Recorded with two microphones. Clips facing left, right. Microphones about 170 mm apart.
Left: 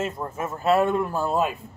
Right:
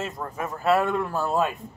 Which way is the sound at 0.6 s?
20° left (ahead or behind).